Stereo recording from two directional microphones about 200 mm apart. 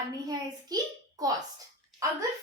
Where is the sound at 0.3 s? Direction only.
20° right (ahead or behind).